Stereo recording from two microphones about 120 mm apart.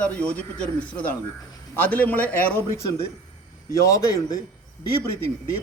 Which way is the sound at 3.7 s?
25° left (ahead or behind).